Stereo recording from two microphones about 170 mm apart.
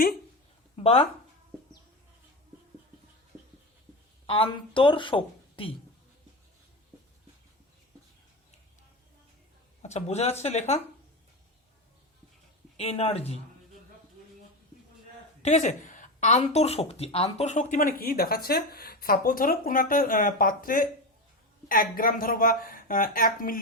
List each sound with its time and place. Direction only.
0.8 s speech: 35° left (ahead or behind)
4.3 s a woman's voice: 30° left (ahead or behind)
9.8 s speech: 40° left (ahead or behind)
12.7 s speech: 35° left (ahead or behind)
15.4 s a woman's voice: 40° left (ahead or behind)